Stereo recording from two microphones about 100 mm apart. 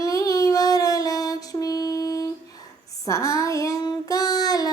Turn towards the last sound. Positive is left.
turn(degrees=40)  # may be behind; listen again after turning